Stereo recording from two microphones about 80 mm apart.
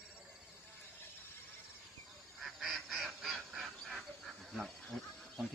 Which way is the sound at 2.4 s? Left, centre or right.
Centre.